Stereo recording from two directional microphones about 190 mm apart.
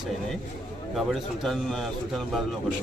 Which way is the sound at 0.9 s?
Centre (ahead or behind).